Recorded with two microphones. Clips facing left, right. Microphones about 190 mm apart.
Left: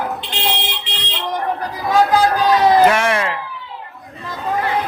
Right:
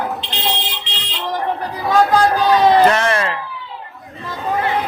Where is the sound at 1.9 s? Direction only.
5° left (ahead or behind).